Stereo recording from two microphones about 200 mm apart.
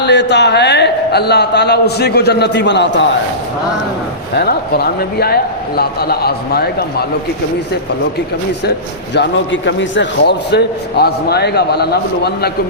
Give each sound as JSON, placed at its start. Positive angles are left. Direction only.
{"t": 0.0, "sound": "a man's voice", "side_deg": 60}
{"t": 4.4, "sound": "a man's voice", "side_deg": 50}
{"t": 9.1, "sound": "a man's voice", "side_deg": 60}